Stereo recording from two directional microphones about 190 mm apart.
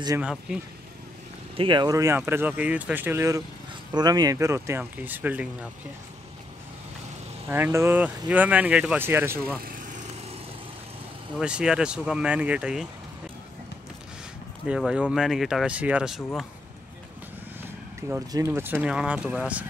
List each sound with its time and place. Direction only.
0.2 s speech: 5° right (ahead or behind)
1.6 s speech: 25° right (ahead or behind); by 5.5 s 10° right (ahead or behind)
7.4 s speech: 10° right (ahead or behind)
9.6 s vehicle: 45° right (ahead or behind)
11.3 s speech: 5° right (ahead or behind)
14.7 s speech: 5° right (ahead or behind)
18.0 s speech: 15° right (ahead or behind)